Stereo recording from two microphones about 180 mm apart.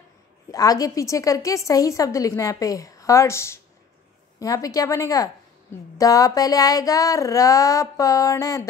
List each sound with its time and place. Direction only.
0.5 s a woman's voice: 20° left (ahead or behind)